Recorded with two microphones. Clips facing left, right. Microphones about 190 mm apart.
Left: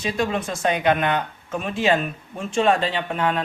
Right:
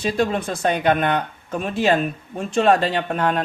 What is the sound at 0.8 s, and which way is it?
Speech, 50° right (ahead or behind).